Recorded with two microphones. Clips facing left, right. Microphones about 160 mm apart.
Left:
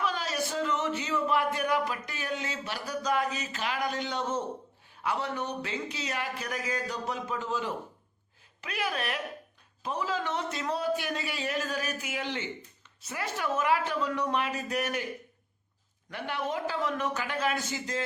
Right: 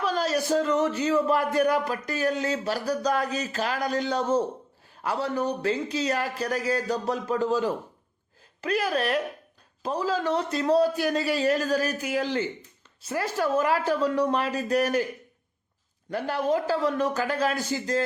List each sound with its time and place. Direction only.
0.0 s speech: 40° right (ahead or behind)
16.0 s speech: 35° right (ahead or behind)